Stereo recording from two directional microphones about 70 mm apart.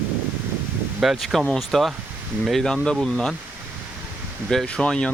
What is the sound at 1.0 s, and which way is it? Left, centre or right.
Speech, centre.